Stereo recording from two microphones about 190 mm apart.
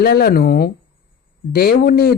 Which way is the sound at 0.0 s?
55° left (ahead or behind).